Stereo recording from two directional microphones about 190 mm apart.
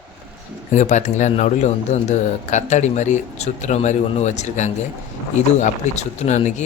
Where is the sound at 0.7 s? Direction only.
40° left (ahead or behind).